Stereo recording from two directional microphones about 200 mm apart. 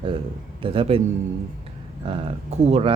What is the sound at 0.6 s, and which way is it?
Speech, 25° right (ahead or behind).